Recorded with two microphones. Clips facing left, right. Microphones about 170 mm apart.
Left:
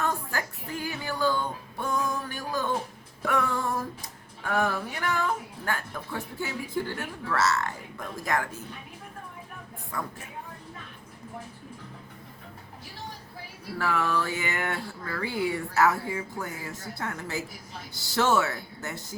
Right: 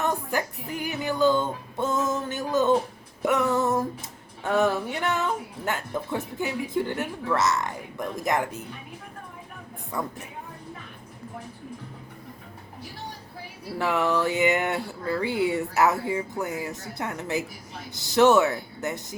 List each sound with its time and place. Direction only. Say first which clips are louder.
0.0 s music: right 4 dB; 20° right (ahead or behind)
4.4 s a sound: right 5 dB; 20° right (ahead or behind)
5.6 s speech: right 4 dB; 20° right (ahead or behind)
13.7 s speech: right 3 dB; 20° right (ahead or behind)